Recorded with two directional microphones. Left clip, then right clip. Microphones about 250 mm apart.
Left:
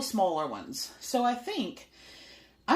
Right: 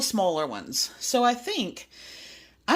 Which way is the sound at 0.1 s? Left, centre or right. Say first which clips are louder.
Left 1 dB; right.